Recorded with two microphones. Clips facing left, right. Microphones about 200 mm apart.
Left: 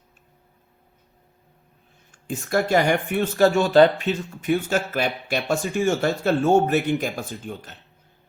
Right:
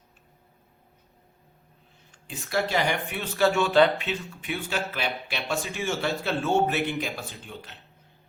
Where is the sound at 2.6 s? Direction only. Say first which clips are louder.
Left 7 dB; 45° left (ahead or behind).